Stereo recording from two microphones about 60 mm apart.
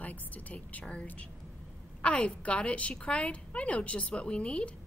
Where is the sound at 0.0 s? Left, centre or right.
Left.